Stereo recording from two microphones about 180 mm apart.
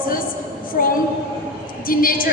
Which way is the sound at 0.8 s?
55° left (ahead or behind).